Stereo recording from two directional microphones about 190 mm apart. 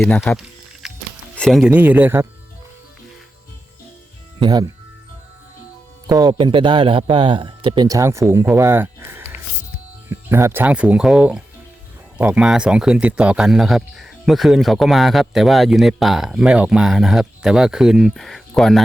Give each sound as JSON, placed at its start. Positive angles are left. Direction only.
{"t": 0.0, "sound": "a man's voice", "side_deg": 5}
{"t": 0.3, "sound": "music", "side_deg": -5}
{"t": 1.4, "sound": "speech", "side_deg": 0}
{"t": 4.4, "sound": "speech", "side_deg": -20}
{"t": 6.1, "sound": "a man's voice", "side_deg": -20}